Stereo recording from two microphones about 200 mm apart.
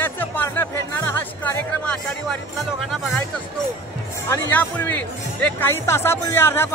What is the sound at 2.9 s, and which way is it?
Speech, centre (ahead or behind).